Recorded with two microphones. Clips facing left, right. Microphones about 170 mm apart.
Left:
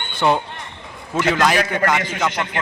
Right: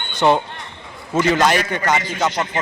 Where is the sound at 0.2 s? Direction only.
Centre (ahead or behind).